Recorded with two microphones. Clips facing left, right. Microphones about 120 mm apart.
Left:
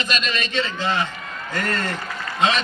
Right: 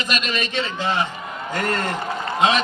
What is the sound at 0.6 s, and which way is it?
A man's voice, 25° right (ahead or behind).